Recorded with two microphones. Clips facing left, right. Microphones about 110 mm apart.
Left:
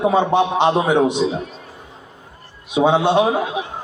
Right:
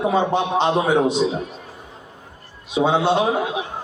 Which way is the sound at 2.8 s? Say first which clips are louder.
Left 3 dB; 15° left (ahead or behind).